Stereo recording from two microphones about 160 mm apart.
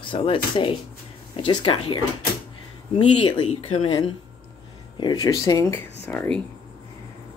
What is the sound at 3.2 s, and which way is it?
Speech, 35° left (ahead or behind).